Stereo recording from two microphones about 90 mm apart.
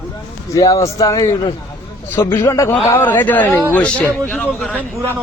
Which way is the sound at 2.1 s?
25° left (ahead or behind).